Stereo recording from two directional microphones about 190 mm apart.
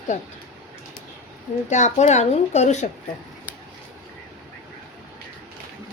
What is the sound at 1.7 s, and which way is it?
Speech, 40° left (ahead or behind).